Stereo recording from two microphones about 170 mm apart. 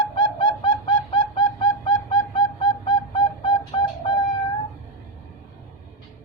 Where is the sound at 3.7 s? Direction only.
30° left (ahead or behind).